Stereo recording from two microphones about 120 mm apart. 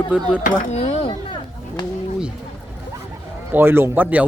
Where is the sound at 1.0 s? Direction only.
40° left (ahead or behind).